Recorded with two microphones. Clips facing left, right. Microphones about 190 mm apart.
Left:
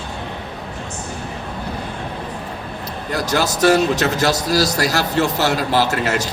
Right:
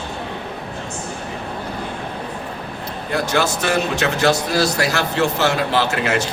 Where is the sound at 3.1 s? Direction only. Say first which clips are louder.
Even; 40° left (ahead or behind).